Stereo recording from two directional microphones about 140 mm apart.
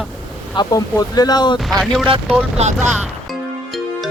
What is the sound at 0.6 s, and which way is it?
Speech, 30° left (ahead or behind).